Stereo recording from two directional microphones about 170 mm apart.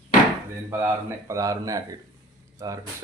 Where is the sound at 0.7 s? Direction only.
15° right (ahead or behind).